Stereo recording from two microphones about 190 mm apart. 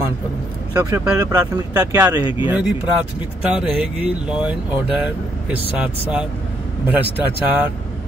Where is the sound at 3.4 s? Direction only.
5° right (ahead or behind).